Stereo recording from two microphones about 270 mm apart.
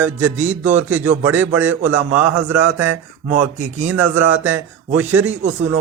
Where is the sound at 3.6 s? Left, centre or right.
Right.